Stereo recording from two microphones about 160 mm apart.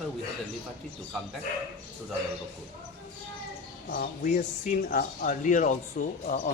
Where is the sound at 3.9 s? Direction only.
55° left (ahead or behind).